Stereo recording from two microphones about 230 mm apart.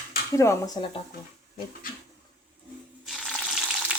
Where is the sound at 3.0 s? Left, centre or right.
Centre.